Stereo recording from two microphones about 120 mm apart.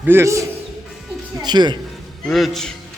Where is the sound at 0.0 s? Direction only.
20° right (ahead or behind).